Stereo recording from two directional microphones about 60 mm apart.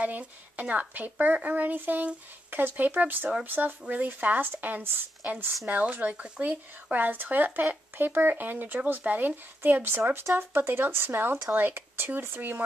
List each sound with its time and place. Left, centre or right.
0.0 s a woman's voice: right